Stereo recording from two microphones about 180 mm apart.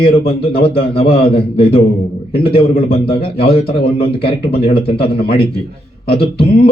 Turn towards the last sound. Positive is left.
turn(degrees=35)  # may be behind; listen again after turning